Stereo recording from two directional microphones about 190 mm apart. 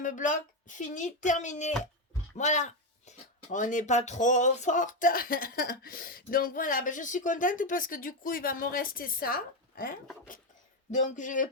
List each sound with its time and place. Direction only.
0.0 s speech: 45° left (ahead or behind)
10.9 s speech: 40° left (ahead or behind)